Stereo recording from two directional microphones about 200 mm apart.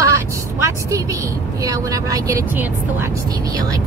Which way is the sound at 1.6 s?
15° right (ahead or behind).